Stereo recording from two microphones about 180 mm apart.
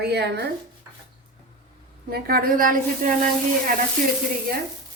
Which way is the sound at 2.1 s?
55° right (ahead or behind).